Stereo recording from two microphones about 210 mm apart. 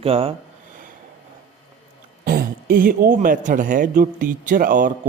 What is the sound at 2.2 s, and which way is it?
Speech, 45° right (ahead or behind).